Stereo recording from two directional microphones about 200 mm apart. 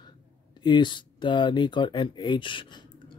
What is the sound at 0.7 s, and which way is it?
Speech, 20° left (ahead or behind).